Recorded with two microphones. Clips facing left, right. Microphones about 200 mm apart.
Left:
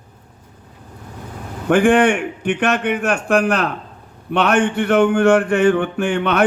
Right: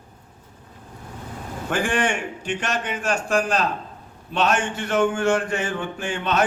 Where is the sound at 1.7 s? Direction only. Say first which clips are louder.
Left 10 dB; 55° left (ahead or behind).